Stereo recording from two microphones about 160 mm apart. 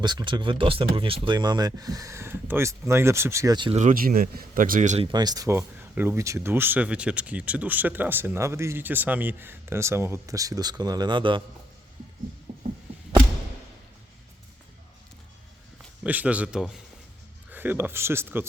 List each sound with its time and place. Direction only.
0.0 s speech: 25° right (ahead or behind)
3.8 s speech: 60° right (ahead or behind)
5.1 s speech: 25° right (ahead or behind)
12.5 s heart sounds: 50° right (ahead or behind)
16.0 s speech: 10° right (ahead or behind)